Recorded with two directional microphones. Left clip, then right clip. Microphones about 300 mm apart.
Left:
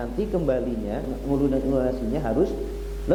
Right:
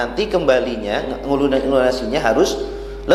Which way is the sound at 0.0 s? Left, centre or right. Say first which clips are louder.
Right 8 dB; centre.